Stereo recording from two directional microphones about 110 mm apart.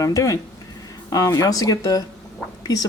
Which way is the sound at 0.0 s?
30° left (ahead or behind).